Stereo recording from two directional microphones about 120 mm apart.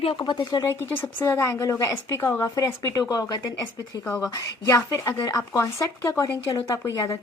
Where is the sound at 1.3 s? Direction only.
25° left (ahead or behind).